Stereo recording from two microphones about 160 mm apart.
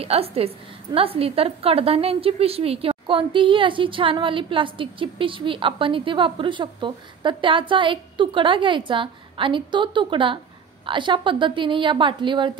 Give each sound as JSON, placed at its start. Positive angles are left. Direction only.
{"t": 0.0, "sound": "a woman's voice", "side_deg": -40}